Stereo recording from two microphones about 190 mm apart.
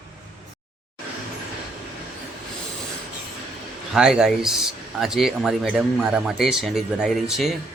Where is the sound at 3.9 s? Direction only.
5° right (ahead or behind).